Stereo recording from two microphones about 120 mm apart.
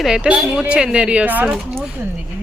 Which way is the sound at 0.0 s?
5° right (ahead or behind).